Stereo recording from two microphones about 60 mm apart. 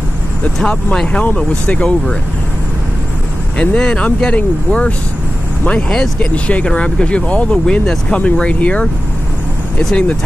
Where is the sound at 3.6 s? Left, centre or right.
Centre.